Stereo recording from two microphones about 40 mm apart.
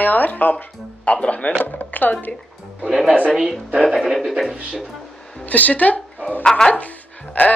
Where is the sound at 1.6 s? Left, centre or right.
Left.